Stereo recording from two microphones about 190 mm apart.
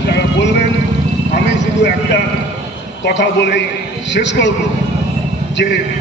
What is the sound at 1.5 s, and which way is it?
A man's voice, 60° left (ahead or behind).